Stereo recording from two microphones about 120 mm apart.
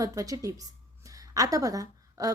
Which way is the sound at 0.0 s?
30° right (ahead or behind).